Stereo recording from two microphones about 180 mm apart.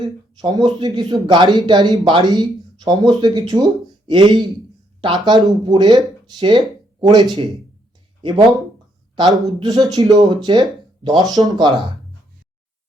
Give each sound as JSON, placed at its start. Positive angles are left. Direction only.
{"t": 0.0, "sound": "speech", "side_deg": -20}
{"t": 7.1, "sound": "speech", "side_deg": -25}